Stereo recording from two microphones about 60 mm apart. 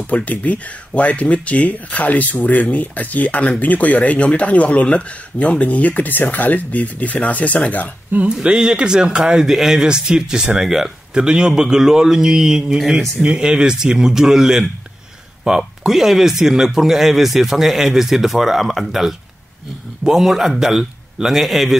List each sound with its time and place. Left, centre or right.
0.0 s speech: left
8.3 s speech: centre